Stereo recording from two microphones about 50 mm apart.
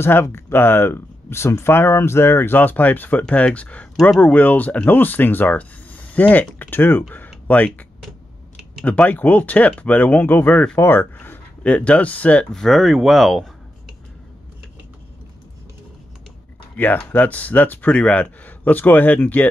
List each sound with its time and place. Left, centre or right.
0.0 s speech: left
3.3 s speech: left
7.4 s speech: left
8.8 s speech: left
12.5 s speech: centre
16.7 s speech: left